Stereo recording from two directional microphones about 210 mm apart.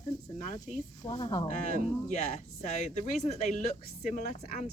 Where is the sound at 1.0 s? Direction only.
20° left (ahead or behind).